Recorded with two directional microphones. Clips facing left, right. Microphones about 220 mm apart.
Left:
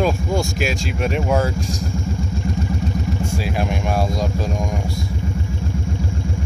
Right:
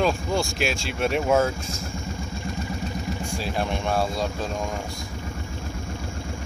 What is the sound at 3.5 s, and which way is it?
Speech, 10° left (ahead or behind).